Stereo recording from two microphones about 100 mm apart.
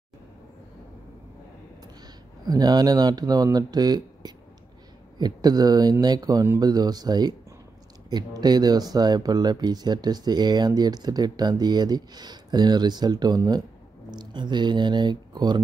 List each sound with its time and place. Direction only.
2.4 s speech: 40° right (ahead or behind)